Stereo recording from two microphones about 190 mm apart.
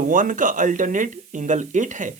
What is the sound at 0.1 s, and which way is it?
Speech, 45° right (ahead or behind).